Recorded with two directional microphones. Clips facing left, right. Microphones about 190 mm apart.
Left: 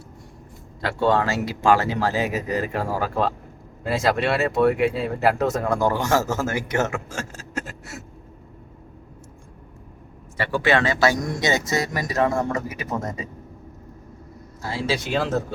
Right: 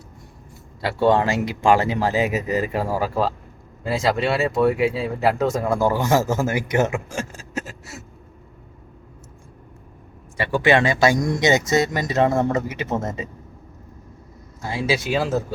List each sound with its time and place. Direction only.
0.8 s speech: 10° right (ahead or behind)
10.3 s speech: 15° right (ahead or behind)
14.6 s speech: 15° right (ahead or behind)